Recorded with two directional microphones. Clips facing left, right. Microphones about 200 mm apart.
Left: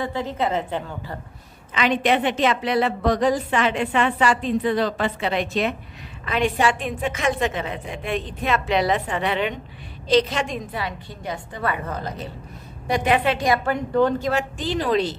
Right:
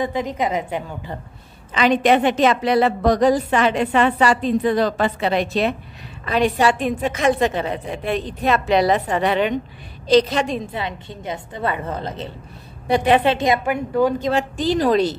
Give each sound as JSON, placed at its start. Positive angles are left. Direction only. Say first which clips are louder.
{"t": 0.0, "sound": "a woman's voice", "louder": "right 3 dB", "side_deg": -15}
{"t": 1.7, "sound": "a woman's voice", "louder": "right 4 dB", "side_deg": -40}
{"t": 14.2, "sound": "a woman's voice", "louder": "right 4 dB", "side_deg": -35}